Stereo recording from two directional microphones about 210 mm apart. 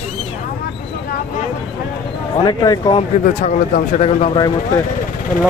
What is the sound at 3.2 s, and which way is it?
Speech, 35° left (ahead or behind).